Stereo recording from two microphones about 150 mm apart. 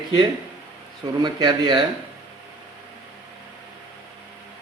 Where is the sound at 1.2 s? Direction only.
30° right (ahead or behind).